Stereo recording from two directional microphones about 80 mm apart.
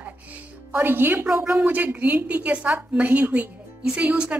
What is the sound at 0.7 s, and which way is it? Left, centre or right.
Speech, right.